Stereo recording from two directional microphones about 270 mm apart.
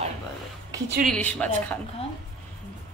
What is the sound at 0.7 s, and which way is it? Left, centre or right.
Speech, centre.